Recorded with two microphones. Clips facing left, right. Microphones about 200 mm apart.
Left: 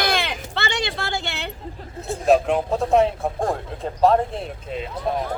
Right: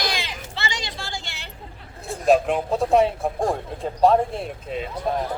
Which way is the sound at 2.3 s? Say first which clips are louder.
Left 1 dB; centre (ahead or behind).